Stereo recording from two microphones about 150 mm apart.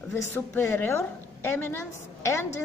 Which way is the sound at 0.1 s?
15° left (ahead or behind).